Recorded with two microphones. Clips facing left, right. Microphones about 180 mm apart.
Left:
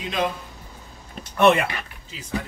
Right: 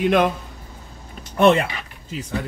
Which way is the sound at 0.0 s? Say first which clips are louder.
Right 8 dB; 60° right (ahead or behind).